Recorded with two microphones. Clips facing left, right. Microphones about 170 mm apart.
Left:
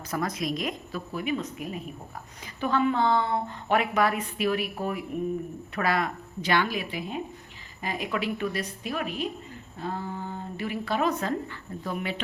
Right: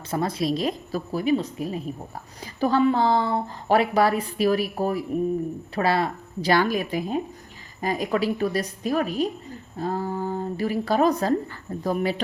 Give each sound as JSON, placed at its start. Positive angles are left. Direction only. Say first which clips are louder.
{"t": 0.1, "sound": "speech", "louder": "right 5 dB", "side_deg": -30}